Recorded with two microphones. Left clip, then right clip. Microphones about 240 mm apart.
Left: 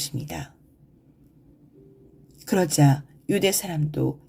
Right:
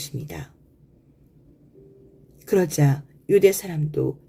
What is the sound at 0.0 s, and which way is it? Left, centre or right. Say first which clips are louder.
Speech: left 3 dB; left.